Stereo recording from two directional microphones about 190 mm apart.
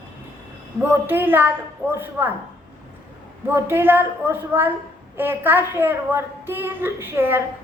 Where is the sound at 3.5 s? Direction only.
10° right (ahead or behind).